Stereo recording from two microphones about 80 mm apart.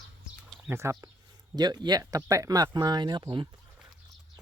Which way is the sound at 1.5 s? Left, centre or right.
Right.